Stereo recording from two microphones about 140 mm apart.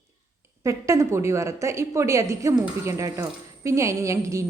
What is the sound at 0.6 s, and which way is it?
A woman's voice, 20° right (ahead or behind).